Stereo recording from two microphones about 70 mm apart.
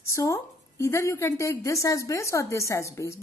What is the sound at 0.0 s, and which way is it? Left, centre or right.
A woman's voice, left.